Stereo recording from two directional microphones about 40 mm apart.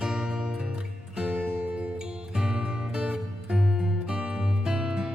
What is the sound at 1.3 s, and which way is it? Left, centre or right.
Music, right.